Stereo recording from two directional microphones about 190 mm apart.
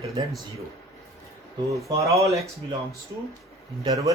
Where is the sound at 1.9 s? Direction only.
15° right (ahead or behind).